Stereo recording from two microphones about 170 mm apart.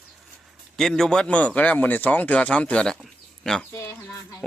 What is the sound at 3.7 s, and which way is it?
Speech, 15° left (ahead or behind).